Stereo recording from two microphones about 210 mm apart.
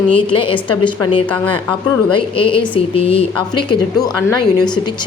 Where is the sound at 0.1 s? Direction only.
25° left (ahead or behind).